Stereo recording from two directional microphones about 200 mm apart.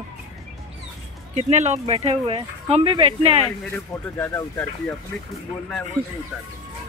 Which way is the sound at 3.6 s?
10° left (ahead or behind).